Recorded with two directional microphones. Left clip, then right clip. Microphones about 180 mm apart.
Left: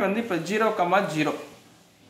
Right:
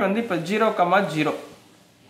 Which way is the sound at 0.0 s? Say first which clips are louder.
Right 2 dB; 20° right (ahead or behind).